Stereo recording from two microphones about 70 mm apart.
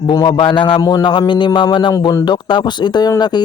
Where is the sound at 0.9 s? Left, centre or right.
Left.